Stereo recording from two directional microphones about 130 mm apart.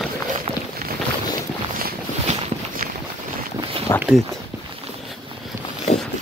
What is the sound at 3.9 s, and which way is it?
Speech, 25° left (ahead or behind).